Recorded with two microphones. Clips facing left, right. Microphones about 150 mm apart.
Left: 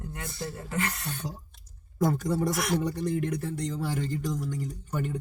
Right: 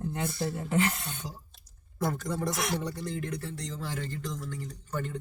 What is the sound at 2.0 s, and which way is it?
Speech, 15° left (ahead or behind).